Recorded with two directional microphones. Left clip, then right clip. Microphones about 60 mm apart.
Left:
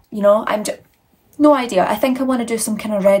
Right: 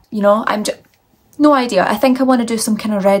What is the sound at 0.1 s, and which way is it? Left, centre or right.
Speech, right.